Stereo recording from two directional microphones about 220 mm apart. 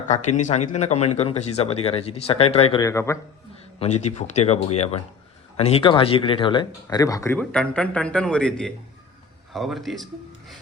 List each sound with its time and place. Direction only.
0.1 s speech: 30° left (ahead or behind); by 3.2 s 15° left (ahead or behind)
3.8 s speech: 30° left (ahead or behind); by 10.1 s centre (ahead or behind)